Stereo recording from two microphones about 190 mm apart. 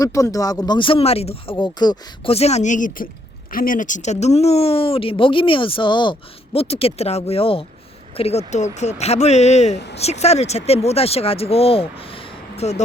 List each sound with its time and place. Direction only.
0.0 s speech: 15° left (ahead or behind); by 12.8 s 35° left (ahead or behind)